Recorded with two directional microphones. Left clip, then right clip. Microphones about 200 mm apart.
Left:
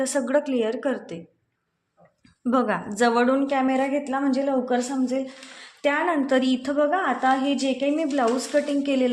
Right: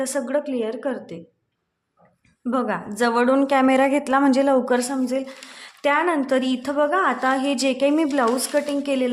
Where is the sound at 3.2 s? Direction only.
20° right (ahead or behind).